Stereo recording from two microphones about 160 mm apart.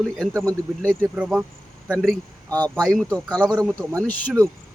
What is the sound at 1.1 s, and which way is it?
Speech, 5° right (ahead or behind).